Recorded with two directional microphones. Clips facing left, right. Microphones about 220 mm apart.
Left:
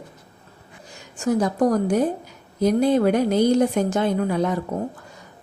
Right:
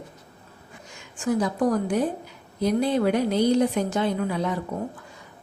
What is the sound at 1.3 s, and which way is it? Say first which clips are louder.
A woman's voice: left 3 dB; 45° left (ahead or behind).